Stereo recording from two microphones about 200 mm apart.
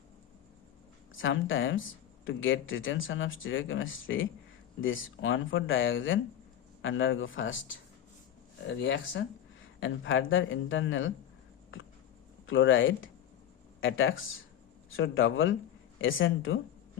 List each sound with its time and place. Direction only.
1.1 s speech: 75° left (ahead or behind)
8.8 s speech: 65° left (ahead or behind)
12.5 s speech: 75° left (ahead or behind)